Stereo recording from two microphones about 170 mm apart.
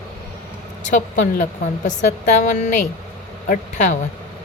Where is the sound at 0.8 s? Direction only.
50° left (ahead or behind).